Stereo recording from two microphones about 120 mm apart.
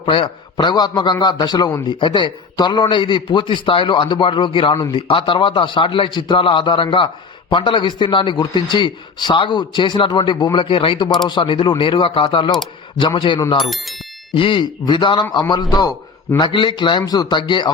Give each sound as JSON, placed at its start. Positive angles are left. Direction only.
{"t": 0.0, "sound": "a man's voice", "side_deg": 45}
{"t": 0.5, "sound": "a man's voice", "side_deg": 35}
{"t": 13.6, "sound": "speech", "side_deg": 0}
{"t": 14.3, "sound": "a man's voice", "side_deg": 45}